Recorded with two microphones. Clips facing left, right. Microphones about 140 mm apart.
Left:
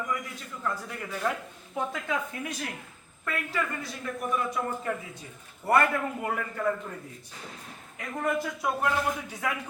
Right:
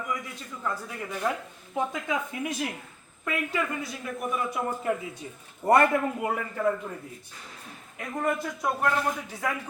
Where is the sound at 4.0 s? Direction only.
15° right (ahead or behind).